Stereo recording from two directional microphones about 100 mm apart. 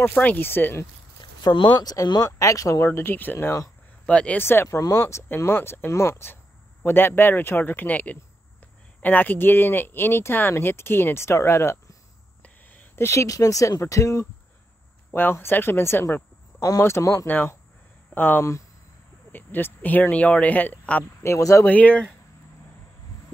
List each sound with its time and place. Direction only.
0.0 s speech: 15° left (ahead or behind)
1.2 s speech: 50° left (ahead or behind); by 3.5 s 20° left (ahead or behind)
4.0 s speech: 10° left (ahead or behind)
4.4 s speech: 25° left (ahead or behind)
5.3 s speech: 20° left (ahead or behind)
15.0 s speech: 20° left (ahead or behind)
16.6 s speech: 30° left (ahead or behind)
17.3 s speech: 20° left (ahead or behind)
21.2 s speech: 30° left (ahead or behind)
21.6 s speech: 15° left (ahead or behind)